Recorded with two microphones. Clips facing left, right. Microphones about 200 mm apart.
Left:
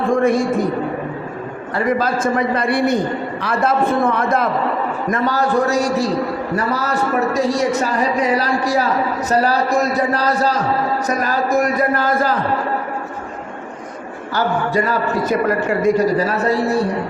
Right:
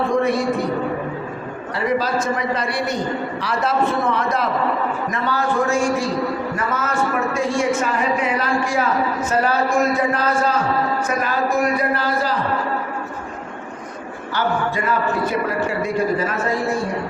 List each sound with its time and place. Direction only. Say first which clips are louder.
0.1 s a man's voice: left 3 dB; 50° left (ahead or behind)
1.7 s a man's voice: left 2 dB; 50° left (ahead or behind)
5.1 s speech: left 5 dB; 40° left (ahead or behind)
14.3 s speech: left 3 dB; 40° left (ahead or behind)